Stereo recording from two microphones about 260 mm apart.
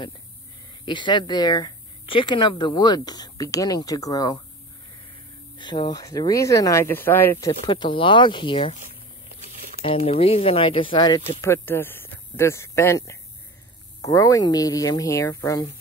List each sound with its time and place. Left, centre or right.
0.8 s speech: centre
5.6 s speech: centre
9.8 s speech: left